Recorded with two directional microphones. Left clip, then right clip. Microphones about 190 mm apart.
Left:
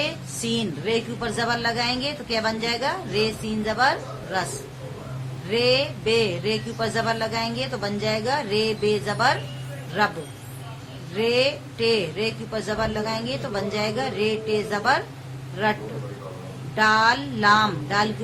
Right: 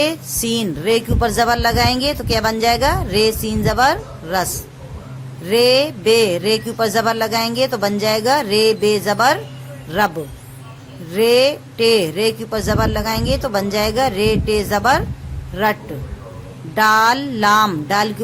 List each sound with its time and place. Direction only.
0.0 s a woman's voice: 60° right (ahead or behind)
5.5 s a woman's voice: 60° right (ahead or behind)
11.2 s a woman's voice: 60° right (ahead or behind)
16.7 s a woman's voice: 60° right (ahead or behind)